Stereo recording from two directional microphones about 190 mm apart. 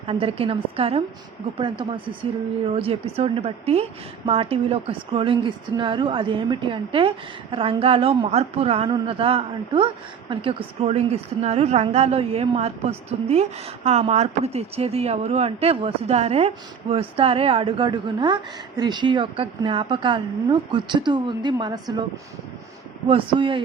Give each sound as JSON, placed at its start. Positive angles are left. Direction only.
{"t": 0.1, "sound": "a woman's voice", "side_deg": -30}
{"t": 23.0, "sound": "a woman's voice", "side_deg": -25}